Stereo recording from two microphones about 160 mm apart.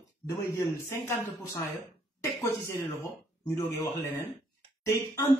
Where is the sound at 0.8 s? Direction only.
15° left (ahead or behind).